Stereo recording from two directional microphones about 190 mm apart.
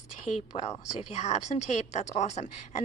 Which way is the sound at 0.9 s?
35° left (ahead or behind).